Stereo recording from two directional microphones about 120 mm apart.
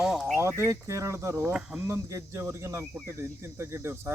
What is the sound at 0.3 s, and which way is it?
Speech, 20° right (ahead or behind).